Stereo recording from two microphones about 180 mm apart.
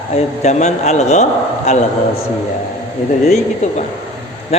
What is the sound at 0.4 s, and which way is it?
A man's voice, 40° left (ahead or behind).